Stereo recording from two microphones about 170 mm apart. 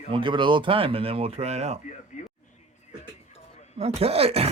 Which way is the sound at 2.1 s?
45° left (ahead or behind).